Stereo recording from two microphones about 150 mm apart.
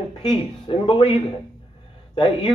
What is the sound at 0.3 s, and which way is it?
A man's voice, 35° left (ahead or behind).